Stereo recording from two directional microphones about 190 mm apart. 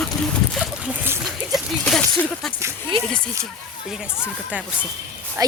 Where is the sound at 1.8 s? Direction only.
5° left (ahead or behind).